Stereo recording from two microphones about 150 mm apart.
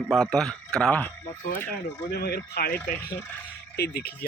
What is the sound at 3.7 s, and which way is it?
Speech, 90° left.